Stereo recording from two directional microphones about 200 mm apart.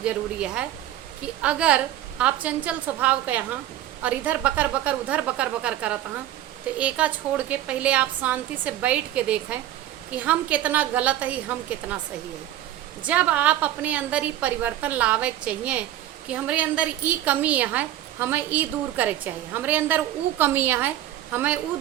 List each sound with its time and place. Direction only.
0.0 s a woman's voice: 5° right (ahead or behind)
13.1 s a woman's voice: 10° right (ahead or behind)